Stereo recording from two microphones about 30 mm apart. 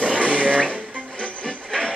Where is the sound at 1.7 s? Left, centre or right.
Centre.